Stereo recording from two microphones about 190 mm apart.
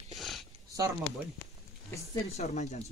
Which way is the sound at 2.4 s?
40° left (ahead or behind).